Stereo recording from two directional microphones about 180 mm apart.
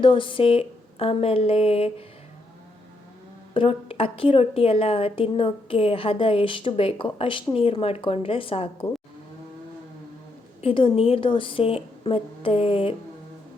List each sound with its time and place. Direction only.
0.0 s a woman's voice: 30° left (ahead or behind)
3.5 s a woman's voice: 30° left (ahead or behind)
10.6 s a woman's voice: 30° left (ahead or behind)